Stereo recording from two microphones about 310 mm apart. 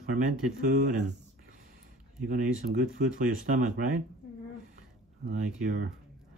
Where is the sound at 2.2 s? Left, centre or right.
Right.